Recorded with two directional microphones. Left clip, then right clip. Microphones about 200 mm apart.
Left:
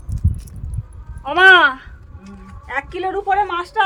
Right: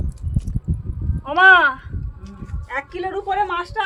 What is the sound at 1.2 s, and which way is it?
Speech, 55° left (ahead or behind).